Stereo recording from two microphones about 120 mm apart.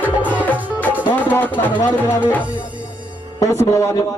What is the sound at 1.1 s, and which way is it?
Music, 15° left (ahead or behind).